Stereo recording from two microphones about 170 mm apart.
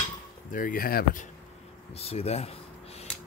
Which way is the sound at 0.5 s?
55° left (ahead or behind).